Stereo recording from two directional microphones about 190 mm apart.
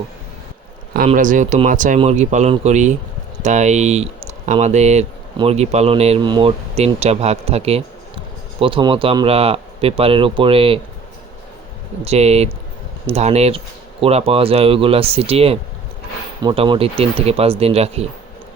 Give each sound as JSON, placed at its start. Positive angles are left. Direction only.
{"t": 1.0, "sound": "speech", "side_deg": -45}
{"t": 12.0, "sound": "speech", "side_deg": -35}